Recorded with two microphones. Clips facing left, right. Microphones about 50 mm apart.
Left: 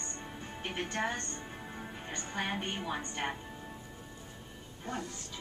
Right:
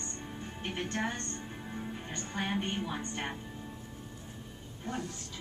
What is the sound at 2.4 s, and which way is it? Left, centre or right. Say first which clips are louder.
Speech: right 2 dB; centre.